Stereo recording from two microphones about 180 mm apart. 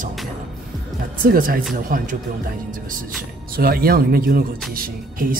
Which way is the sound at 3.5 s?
55° right (ahead or behind).